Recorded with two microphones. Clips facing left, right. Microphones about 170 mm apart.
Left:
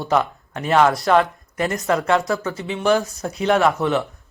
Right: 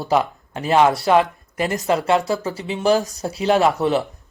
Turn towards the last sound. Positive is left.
turn(degrees=-35)  # may be behind; listen again after turning